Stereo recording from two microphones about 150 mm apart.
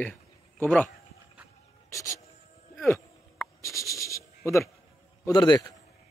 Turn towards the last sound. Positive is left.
turn(degrees=25)  # may be behind; listen again after turning